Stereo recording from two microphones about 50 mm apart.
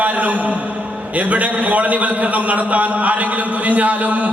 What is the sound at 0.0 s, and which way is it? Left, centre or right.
A man's voice, right.